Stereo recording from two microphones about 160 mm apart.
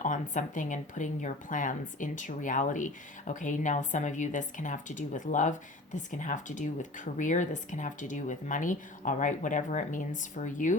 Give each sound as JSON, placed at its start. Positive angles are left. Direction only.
{"t": 0.0, "sound": "speech", "side_deg": 55}